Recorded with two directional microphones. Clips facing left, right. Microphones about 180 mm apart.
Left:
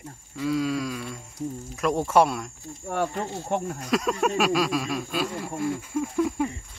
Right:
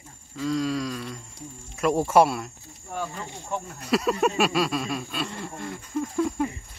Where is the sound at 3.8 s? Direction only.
5° right (ahead or behind).